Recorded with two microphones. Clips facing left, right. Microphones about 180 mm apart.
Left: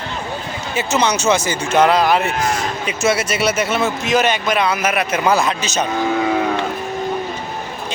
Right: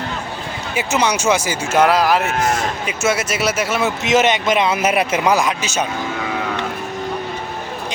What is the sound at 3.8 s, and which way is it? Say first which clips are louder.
A man's voice: right 4 dB; 20° right (ahead or behind).